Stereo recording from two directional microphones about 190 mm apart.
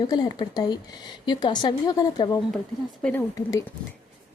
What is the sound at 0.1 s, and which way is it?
Speech, 20° left (ahead or behind).